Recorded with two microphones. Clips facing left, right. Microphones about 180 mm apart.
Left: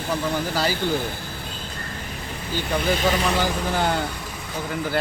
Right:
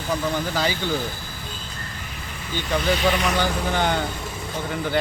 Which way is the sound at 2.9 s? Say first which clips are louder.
Even; 40° left (ahead or behind).